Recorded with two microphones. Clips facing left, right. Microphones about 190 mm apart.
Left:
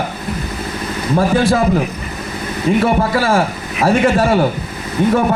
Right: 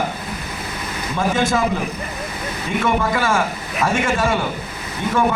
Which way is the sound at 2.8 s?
35° left (ahead or behind).